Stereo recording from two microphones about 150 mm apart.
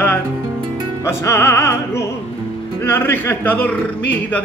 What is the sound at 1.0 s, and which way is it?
Music, 15° left (ahead or behind).